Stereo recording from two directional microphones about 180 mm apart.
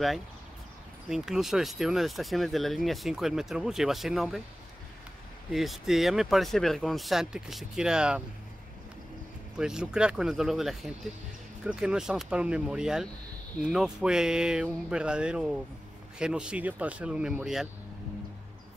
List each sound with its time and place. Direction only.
1.0 s speech: 5° right (ahead or behind)
5.5 s speech: centre (ahead or behind)
9.6 s speech: 5° right (ahead or behind)